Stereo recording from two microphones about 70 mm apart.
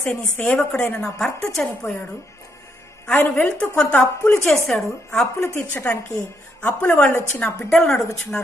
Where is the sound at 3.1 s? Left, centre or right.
Left.